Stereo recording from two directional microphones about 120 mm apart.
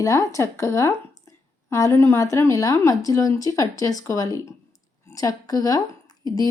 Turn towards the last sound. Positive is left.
turn(degrees=30)  # may be behind; listen again after turning